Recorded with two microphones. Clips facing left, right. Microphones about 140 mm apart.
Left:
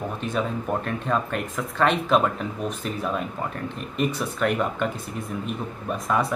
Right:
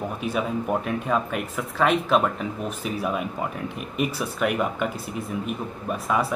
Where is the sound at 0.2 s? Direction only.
10° right (ahead or behind).